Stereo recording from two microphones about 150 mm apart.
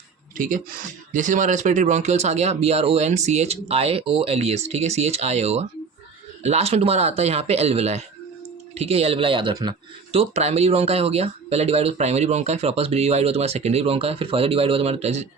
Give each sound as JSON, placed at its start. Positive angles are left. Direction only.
{"t": 0.3, "sound": "speech", "side_deg": -60}